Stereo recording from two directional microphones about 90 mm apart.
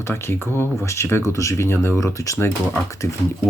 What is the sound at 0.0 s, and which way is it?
Speech, 25° left (ahead or behind).